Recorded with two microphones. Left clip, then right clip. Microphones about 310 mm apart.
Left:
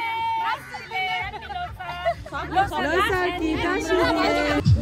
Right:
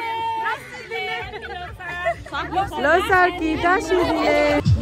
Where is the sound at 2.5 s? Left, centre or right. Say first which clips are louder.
Right 3 dB; centre.